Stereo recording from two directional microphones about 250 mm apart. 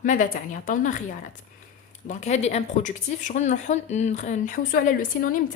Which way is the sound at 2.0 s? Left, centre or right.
Left.